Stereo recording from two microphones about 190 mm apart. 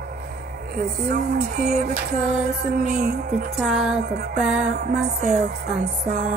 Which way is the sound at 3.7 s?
Centre (ahead or behind).